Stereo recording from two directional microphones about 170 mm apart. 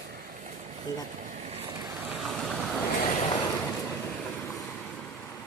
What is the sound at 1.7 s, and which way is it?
Boat, 25° right (ahead or behind).